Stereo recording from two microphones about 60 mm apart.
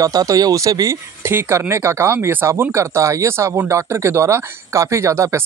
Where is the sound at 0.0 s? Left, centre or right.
Right.